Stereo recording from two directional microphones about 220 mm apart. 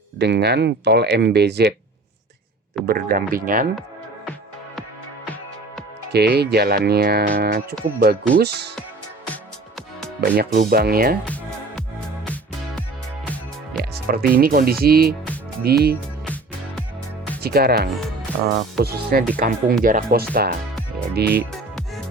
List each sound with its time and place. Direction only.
0.2 s speech: 50° right (ahead or behind)
2.8 s speech: 40° right (ahead or behind)
6.1 s speech: 50° right (ahead or behind)
9.2 s music: 5° left (ahead or behind)
10.2 s speech: 45° right (ahead or behind)
11.3 s music: 5° left (ahead or behind)
13.9 s speech: 45° right (ahead or behind)
16.2 s music: 5° left (ahead or behind)
17.4 s speech: 45° right (ahead or behind)